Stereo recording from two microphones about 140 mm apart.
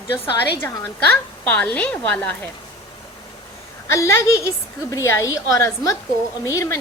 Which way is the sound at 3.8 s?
20° left (ahead or behind).